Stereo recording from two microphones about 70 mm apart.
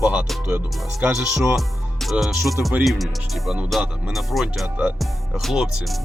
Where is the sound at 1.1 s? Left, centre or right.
Centre.